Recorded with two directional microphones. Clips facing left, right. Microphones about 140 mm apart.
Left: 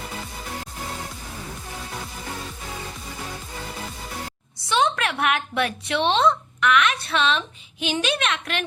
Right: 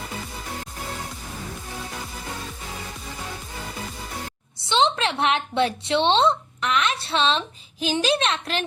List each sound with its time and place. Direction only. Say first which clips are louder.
4.7 s speech: right 1 dB; 25° right (ahead or behind)